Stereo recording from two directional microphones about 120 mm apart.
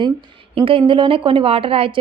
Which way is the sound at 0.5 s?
50° right (ahead or behind).